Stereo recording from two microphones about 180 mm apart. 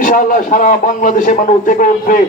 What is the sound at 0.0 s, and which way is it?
A man's voice, 45° left (ahead or behind).